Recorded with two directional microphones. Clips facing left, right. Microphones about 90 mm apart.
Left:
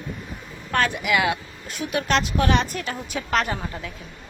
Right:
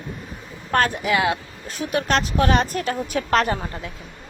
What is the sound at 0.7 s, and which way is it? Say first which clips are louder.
Speech: right 2 dB; 40° right (ahead or behind).